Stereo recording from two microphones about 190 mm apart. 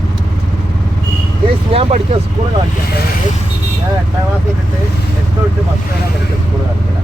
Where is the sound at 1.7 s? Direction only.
30° right (ahead or behind).